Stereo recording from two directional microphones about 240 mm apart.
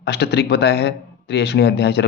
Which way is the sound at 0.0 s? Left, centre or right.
Left.